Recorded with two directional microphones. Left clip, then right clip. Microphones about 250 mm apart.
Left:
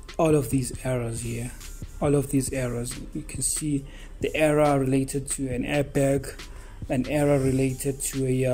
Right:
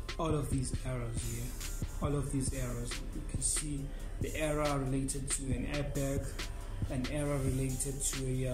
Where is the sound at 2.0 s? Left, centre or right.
Left.